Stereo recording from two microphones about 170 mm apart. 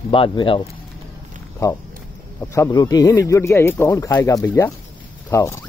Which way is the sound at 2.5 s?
20° left (ahead or behind).